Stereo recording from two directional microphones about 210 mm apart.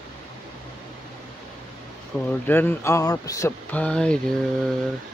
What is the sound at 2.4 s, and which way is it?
Speech, 10° left (ahead or behind).